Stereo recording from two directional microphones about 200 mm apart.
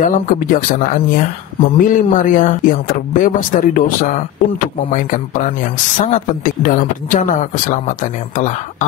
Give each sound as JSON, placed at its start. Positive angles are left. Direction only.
{"t": 0.0, "sound": "speech", "side_deg": 45}